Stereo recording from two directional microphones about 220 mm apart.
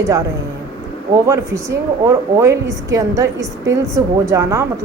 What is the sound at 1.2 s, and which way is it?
A woman's voice, 15° right (ahead or behind).